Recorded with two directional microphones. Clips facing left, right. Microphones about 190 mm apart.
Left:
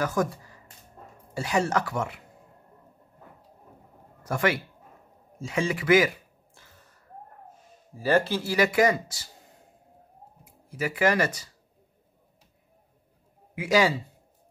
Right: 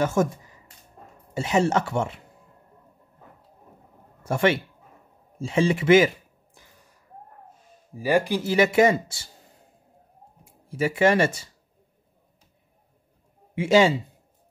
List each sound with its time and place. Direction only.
0.0 s speech: 25° right (ahead or behind)
4.2 s speech: 25° right (ahead or behind)
5.4 s a sound: 30° right (ahead or behind); by 7.0 s 15° right (ahead or behind)
7.9 s speech: 15° right (ahead or behind)
10.4 s speech: 25° right (ahead or behind)
13.6 s speech: 25° right (ahead or behind)